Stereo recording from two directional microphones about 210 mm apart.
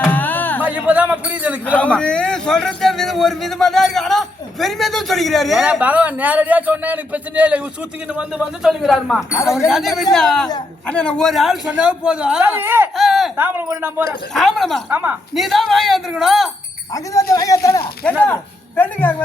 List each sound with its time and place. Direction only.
0.0 s a sound: 10° left (ahead or behind)
0.6 s a sound: 5° right (ahead or behind)
1.6 s a man's voice: 5° left (ahead or behind)
9.3 s speech: 15° left (ahead or behind)
9.6 s a man's voice: centre (ahead or behind)
13.0 s speech: centre (ahead or behind)
14.3 s a man's voice: centre (ahead or behind)
16.9 s speech: 15° left (ahead or behind)